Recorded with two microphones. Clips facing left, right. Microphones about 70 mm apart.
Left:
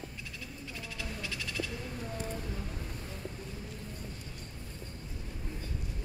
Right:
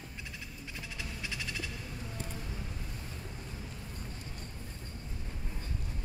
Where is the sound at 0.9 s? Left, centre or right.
Right.